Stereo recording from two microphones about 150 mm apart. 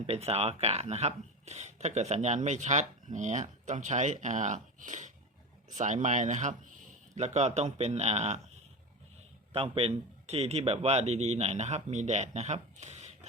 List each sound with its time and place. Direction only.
0.0 s speech: 45° right (ahead or behind)
9.5 s speech: 40° right (ahead or behind)